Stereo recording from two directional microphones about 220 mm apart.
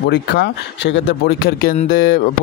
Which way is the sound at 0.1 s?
50° left (ahead or behind).